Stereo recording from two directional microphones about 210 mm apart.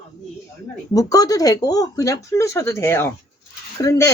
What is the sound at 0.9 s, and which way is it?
A woman's voice, 15° left (ahead or behind).